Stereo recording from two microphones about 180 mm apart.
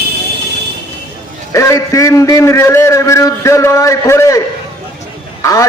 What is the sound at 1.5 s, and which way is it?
A man's voice, 15° left (ahead or behind).